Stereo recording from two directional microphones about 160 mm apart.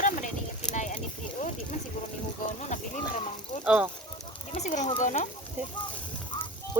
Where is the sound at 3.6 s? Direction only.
10° right (ahead or behind).